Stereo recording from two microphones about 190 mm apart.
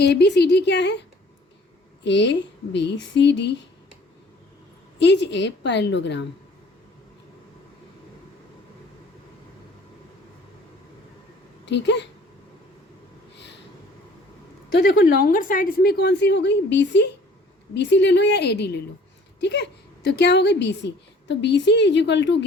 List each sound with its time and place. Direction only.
0.0 s a woman's voice: 60° left (ahead or behind)
2.0 s a woman's voice: 70° left (ahead or behind)
4.9 s a woman's voice: 65° left (ahead or behind)
11.6 s speech: 65° left (ahead or behind)
13.3 s a sound: 65° left (ahead or behind)
14.8 s a woman's voice: 50° left (ahead or behind); by 22.4 s 70° left (ahead or behind)